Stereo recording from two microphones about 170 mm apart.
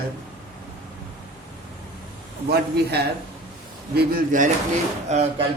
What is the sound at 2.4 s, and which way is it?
Speech, 70° right (ahead or behind).